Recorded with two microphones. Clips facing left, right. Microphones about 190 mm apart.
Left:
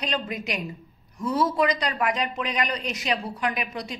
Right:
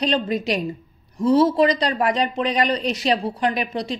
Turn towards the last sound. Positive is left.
turn(degrees=-30)  # may be behind; listen again after turning